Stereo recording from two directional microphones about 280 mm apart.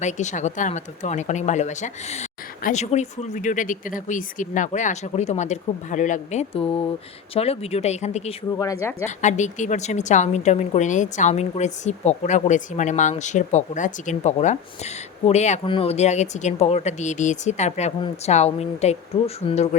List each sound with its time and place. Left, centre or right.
0.0 s a woman's voice: left
9.0 s a woman's voice: left